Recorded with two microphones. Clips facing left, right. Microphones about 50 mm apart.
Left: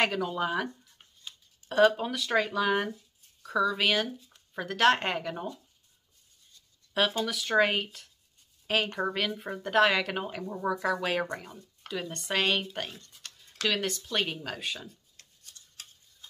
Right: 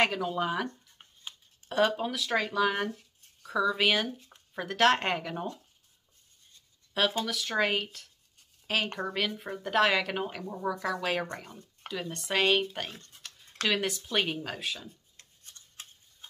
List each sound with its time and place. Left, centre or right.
0.0 s speech: centre
1.7 s speech: centre
7.2 s speech: centre
13.2 s a sound: centre
13.7 s speech: centre
15.1 s tick-tock: right